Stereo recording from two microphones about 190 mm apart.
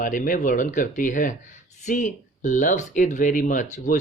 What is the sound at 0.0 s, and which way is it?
Speech, 45° left (ahead or behind).